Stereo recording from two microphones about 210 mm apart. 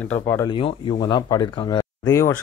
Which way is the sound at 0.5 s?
25° left (ahead or behind).